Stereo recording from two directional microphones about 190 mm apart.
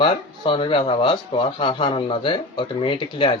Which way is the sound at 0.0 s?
25° left (ahead or behind).